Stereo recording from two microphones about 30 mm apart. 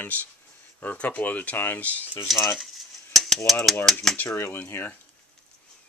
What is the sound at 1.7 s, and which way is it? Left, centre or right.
Speech, left.